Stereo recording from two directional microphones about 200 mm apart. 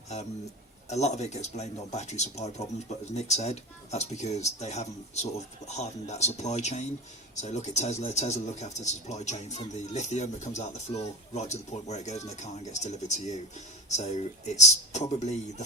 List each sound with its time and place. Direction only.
0.9 s speech: 35° left (ahead or behind)